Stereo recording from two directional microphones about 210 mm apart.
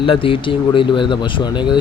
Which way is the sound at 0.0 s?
25° left (ahead or behind).